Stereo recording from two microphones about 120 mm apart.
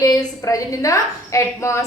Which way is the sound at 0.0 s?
30° left (ahead or behind).